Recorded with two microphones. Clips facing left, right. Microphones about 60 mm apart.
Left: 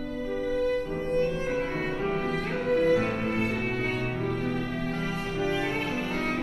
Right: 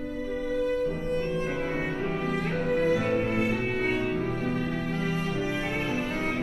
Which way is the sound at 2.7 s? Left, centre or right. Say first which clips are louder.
Left 2 dB; centre.